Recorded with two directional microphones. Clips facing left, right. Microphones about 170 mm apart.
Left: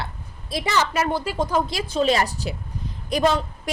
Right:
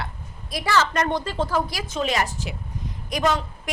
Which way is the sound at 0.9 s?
5° left (ahead or behind).